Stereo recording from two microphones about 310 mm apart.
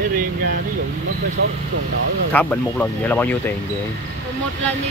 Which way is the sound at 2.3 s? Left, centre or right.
Centre.